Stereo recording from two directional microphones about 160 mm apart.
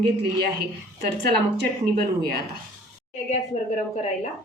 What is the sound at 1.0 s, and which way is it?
Speech, 90° right.